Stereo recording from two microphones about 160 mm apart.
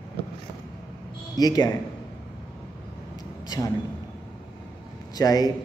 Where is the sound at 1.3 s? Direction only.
25° left (ahead or behind).